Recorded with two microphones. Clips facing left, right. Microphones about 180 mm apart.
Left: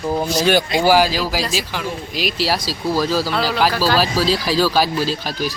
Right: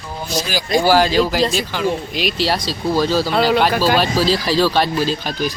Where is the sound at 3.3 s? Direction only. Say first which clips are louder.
Right 5 dB; 25° right (ahead or behind).